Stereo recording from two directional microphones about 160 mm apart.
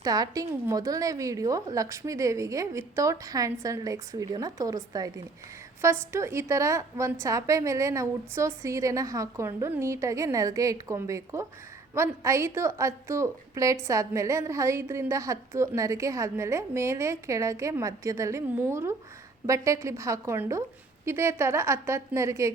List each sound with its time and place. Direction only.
0.0 s a woman's voice: 25° right (ahead or behind)